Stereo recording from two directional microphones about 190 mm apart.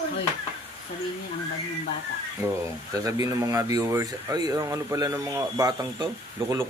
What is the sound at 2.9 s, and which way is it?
Speech, 20° right (ahead or behind).